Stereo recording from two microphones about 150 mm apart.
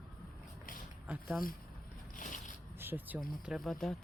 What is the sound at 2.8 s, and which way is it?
Speech, 15° right (ahead or behind).